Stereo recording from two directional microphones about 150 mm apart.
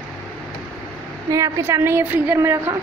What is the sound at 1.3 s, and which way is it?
A woman's voice, 20° right (ahead or behind).